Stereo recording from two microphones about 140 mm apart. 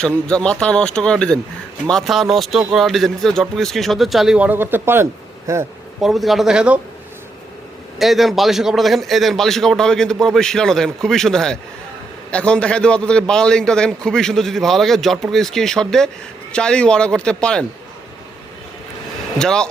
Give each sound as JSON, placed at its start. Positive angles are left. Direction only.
{"t": 0.3, "sound": "a man's voice", "side_deg": 5}
{"t": 6.0, "sound": "a man's voice", "side_deg": 0}
{"t": 7.9, "sound": "a man's voice", "side_deg": 0}
{"t": 19.4, "sound": "a man's voice", "side_deg": 5}